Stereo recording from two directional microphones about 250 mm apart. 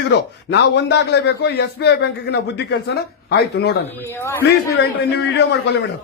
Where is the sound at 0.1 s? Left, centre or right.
Left.